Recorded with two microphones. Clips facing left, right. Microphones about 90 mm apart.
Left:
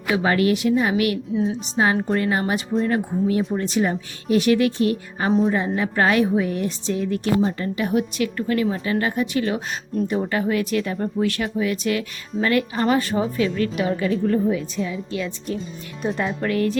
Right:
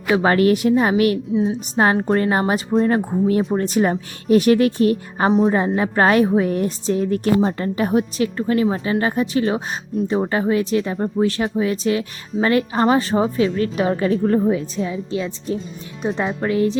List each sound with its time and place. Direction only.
0.1 s a woman's voice: 40° right (ahead or behind)
1.4 s a woman's voice: centre (ahead or behind)
1.7 s a woman's voice: 45° right (ahead or behind); by 16.7 s 20° right (ahead or behind)